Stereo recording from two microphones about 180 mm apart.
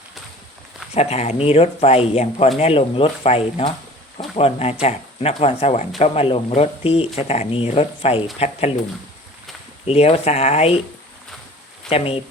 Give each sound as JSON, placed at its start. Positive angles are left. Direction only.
{"t": 0.9, "sound": "speech", "side_deg": 35}
{"t": 9.8, "sound": "speech", "side_deg": 35}
{"t": 11.9, "sound": "speech", "side_deg": 30}